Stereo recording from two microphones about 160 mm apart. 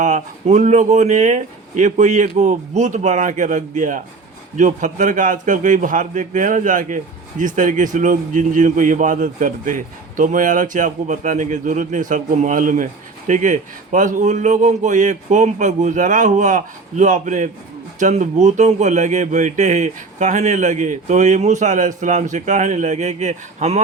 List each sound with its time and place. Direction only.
0.0 s a man's voice: 50° right (ahead or behind)